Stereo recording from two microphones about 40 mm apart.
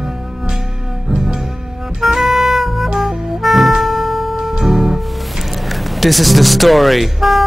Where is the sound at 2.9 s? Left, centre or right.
Centre.